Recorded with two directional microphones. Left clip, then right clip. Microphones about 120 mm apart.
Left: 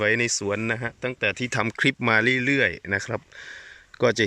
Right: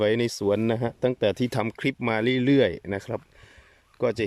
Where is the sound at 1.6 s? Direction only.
15° right (ahead or behind).